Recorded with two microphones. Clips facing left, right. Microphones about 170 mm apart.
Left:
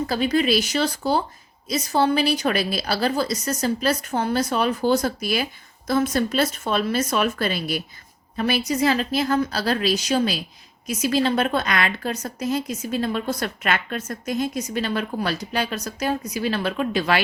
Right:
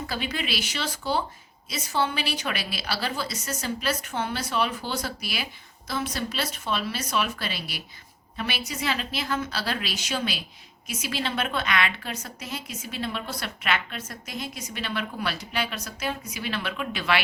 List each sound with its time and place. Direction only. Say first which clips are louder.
0.1 s a woman's voice: left 12 dB; 40° left (ahead or behind)